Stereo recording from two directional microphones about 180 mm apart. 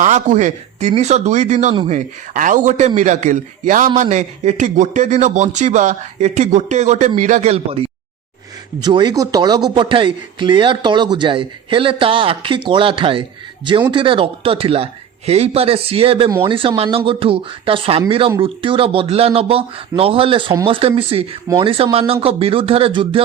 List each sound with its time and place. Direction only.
0.0 s a man's voice: 40° right (ahead or behind)